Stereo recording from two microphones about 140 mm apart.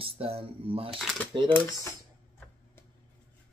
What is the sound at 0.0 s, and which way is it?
Cutlery, 45° right (ahead or behind).